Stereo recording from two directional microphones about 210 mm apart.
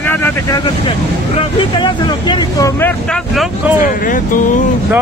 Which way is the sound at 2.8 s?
5° left (ahead or behind).